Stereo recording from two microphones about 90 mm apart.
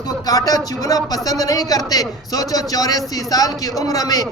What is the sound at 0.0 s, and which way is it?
A man's voice, 45° left (ahead or behind).